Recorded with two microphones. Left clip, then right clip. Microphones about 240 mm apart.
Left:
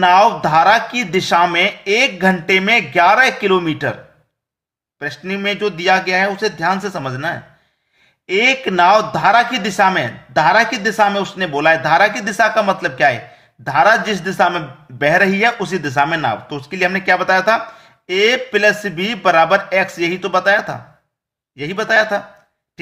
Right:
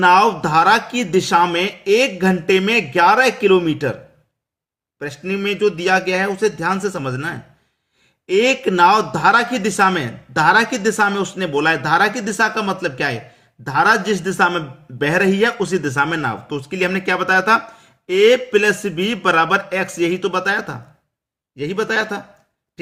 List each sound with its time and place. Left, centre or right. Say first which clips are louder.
0.0 s speech: left 2 dB; centre
4.9 s speech: left 1 dB; centre